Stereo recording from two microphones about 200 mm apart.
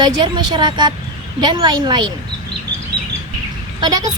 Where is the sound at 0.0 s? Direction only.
20° right (ahead or behind).